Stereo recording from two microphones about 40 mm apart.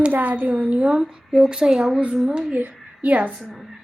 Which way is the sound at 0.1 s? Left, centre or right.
Right.